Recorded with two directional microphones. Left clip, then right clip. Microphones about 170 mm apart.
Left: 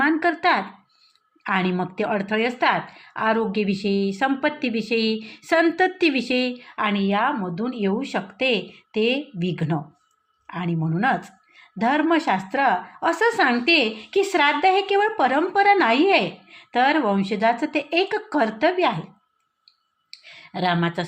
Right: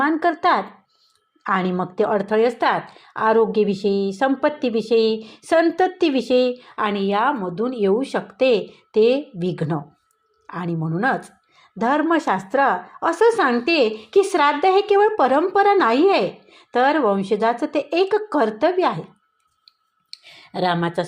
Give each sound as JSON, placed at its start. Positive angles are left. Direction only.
{"t": 0.0, "sound": "speech", "side_deg": -20}
{"t": 19.6, "sound": "clicking", "side_deg": -45}